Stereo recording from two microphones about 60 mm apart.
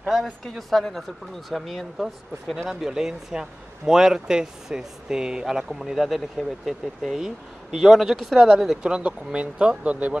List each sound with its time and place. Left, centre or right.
0.1 s speech: centre; by 10.1 s right